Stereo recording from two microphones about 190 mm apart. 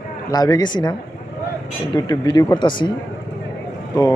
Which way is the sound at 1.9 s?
20° left (ahead or behind).